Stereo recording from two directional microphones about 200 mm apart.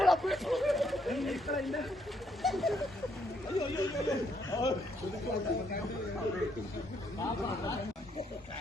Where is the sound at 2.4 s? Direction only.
Centre (ahead or behind).